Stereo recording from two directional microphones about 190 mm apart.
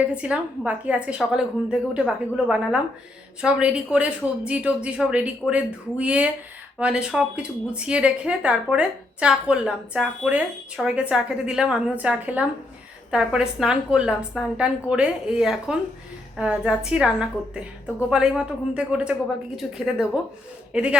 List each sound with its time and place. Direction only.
0.0 s a woman's voice: 5° right (ahead or behind)